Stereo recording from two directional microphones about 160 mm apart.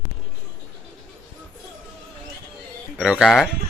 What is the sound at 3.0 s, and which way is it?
Speech, 5° right (ahead or behind).